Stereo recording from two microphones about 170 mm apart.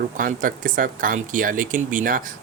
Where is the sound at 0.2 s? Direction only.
55° right (ahead or behind).